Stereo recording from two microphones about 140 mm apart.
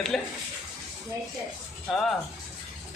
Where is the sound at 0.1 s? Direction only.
5° left (ahead or behind).